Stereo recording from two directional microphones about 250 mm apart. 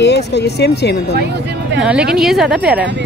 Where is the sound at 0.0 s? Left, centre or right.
Left.